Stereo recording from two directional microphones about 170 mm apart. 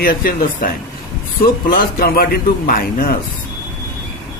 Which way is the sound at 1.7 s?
60° left (ahead or behind).